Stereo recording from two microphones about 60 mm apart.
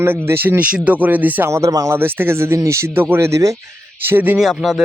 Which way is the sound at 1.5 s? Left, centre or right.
Right.